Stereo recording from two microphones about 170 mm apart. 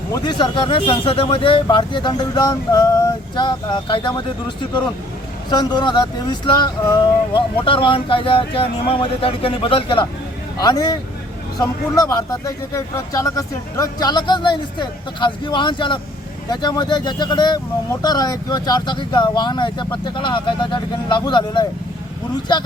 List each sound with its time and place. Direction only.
0.1 s speech: 25° left (ahead or behind)
5.5 s speech: 25° left (ahead or behind)